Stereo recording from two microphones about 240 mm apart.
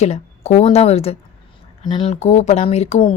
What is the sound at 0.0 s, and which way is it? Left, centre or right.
Speech, left.